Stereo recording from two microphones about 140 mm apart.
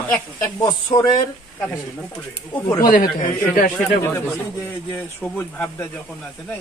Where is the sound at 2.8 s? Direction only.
70° left (ahead or behind).